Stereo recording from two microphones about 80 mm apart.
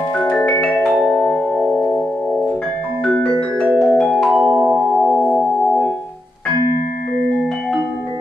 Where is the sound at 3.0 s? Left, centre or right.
Centre.